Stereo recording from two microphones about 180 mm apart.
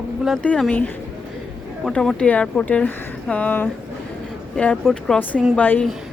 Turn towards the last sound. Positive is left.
turn(degrees=10)  # may be behind; listen again after turning